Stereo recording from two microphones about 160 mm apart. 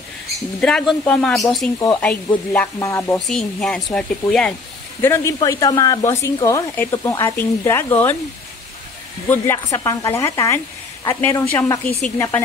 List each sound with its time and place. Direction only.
0.3 s speech: 5° left (ahead or behind)
2.8 s speech: 15° left (ahead or behind)
3.2 s speech: 5° left (ahead or behind)
5.0 s speech: 15° left (ahead or behind)
9.3 s speech: 15° left (ahead or behind)
11.8 s speech: 55° left (ahead or behind)